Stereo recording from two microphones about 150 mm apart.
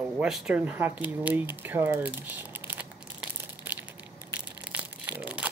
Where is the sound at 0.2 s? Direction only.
5° right (ahead or behind).